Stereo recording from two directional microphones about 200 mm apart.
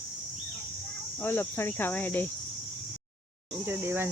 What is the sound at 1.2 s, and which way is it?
Cricket, 10° left (ahead or behind).